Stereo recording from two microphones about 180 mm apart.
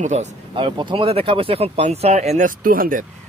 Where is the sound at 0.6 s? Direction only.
25° right (ahead or behind).